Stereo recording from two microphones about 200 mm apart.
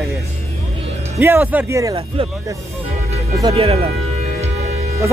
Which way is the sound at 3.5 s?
30° right (ahead or behind).